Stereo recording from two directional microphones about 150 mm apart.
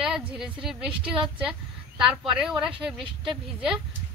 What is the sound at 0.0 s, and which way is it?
A woman's voice, 5° right (ahead or behind).